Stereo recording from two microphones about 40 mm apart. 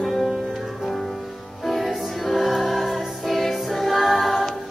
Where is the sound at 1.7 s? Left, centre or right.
Centre.